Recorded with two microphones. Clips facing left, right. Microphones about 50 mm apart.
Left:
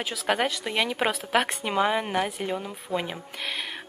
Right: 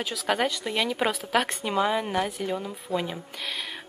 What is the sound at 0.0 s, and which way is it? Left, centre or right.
Speech, centre.